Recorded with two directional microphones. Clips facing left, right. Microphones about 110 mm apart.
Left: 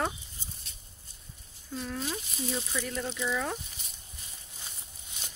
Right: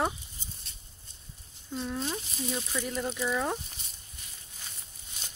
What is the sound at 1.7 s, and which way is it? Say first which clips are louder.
Speech: right 2 dB; 25° right (ahead or behind).